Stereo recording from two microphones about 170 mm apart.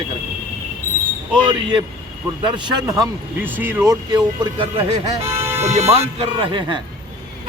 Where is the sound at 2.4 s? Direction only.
25° right (ahead or behind).